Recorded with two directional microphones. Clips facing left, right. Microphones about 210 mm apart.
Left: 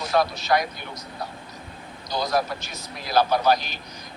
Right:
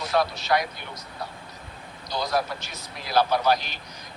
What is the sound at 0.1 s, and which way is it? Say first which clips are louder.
Speech: left 2 dB; 45° left (ahead or behind).